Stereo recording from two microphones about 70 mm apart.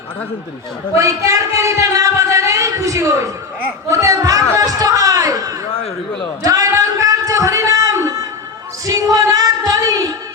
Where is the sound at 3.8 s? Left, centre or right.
Right.